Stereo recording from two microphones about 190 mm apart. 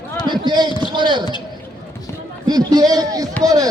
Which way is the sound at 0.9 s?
25° right (ahead or behind).